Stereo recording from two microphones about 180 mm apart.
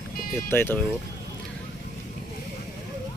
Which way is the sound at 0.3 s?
15° left (ahead or behind).